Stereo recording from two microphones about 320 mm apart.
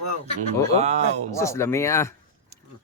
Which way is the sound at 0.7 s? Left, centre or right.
Right.